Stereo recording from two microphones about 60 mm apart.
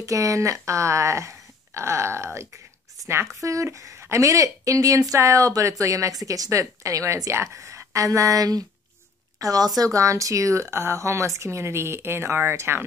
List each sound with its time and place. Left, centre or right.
0.0 s a woman's voice: right
9.8 s speech: right